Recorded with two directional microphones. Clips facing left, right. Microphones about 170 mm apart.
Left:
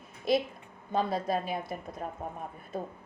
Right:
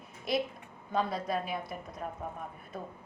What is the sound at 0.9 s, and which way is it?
Speech, 30° left (ahead or behind).